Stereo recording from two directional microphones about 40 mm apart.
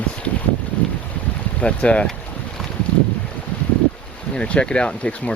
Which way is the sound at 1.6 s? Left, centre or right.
Left.